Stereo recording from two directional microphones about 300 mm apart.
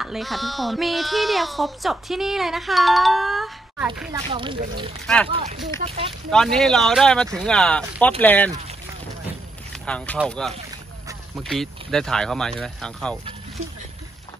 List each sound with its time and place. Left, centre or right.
0.0 s speech: centre
4.3 s speech: centre
5.0 s speech: centre
5.3 s speech: right
6.3 s speech: centre
9.7 s speech: centre